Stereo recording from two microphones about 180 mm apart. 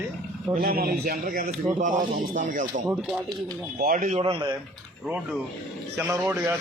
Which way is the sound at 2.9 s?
5° right (ahead or behind).